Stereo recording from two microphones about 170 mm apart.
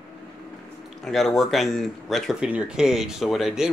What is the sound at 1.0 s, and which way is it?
Speech, centre (ahead or behind).